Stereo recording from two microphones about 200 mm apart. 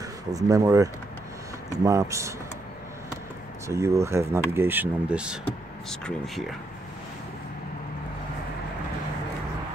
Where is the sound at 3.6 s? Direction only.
15° right (ahead or behind); by 6.4 s 5° left (ahead or behind).